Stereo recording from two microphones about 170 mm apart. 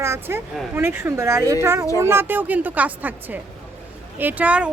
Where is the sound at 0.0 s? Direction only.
15° right (ahead or behind).